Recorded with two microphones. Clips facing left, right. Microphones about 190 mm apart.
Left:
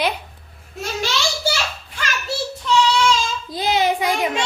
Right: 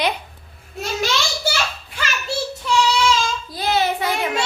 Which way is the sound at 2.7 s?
10° right (ahead or behind).